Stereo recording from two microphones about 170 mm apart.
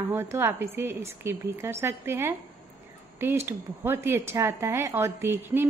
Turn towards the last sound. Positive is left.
turn(degrees=-15)  # may be behind; listen again after turning